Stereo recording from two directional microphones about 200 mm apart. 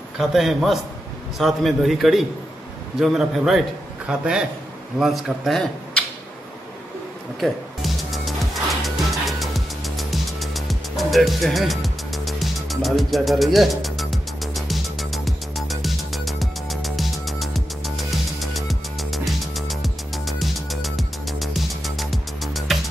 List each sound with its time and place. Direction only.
0.2 s speech: centre (ahead or behind)
7.3 s music: centre (ahead or behind)